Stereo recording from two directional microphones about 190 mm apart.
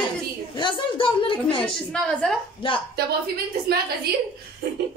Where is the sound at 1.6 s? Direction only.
5° left (ahead or behind).